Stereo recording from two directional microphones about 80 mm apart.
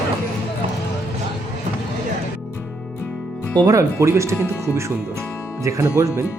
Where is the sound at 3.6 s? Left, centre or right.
Right.